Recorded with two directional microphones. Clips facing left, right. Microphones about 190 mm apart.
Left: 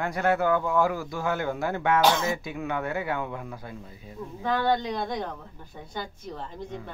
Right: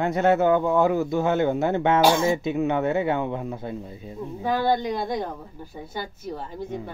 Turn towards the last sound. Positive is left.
turn(degrees=-10)  # may be behind; listen again after turning